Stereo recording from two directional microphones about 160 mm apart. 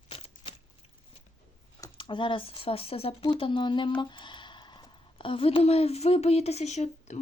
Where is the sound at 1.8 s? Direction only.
30° left (ahead or behind).